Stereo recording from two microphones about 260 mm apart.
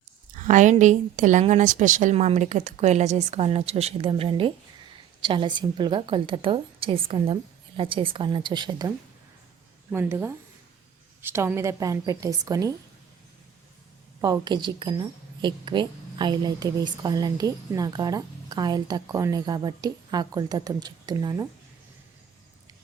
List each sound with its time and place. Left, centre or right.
0.3 s a woman's voice: right
9.9 s a woman's voice: centre
14.2 s a woman's voice: centre